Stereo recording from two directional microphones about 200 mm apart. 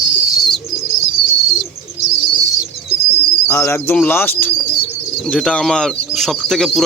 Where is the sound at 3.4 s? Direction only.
15° left (ahead or behind).